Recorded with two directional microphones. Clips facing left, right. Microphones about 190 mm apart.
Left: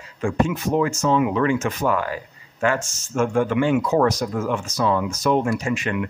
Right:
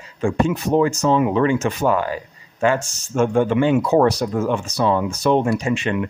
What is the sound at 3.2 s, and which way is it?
Speech, 25° right (ahead or behind).